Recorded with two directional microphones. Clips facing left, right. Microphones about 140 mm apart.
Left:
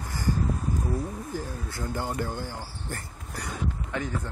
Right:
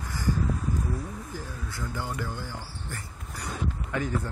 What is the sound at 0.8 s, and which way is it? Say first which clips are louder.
Speech: left 3 dB; 30° left (ahead or behind).